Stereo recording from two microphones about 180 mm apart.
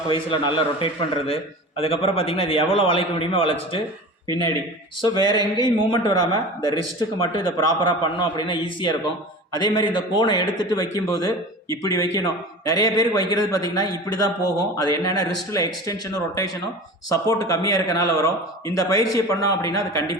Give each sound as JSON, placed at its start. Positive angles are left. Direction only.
{"t": 0.1, "sound": "a man's voice", "side_deg": 30}
{"t": 4.3, "sound": "a man's voice", "side_deg": -25}
{"t": 5.0, "sound": "a man's voice", "side_deg": 25}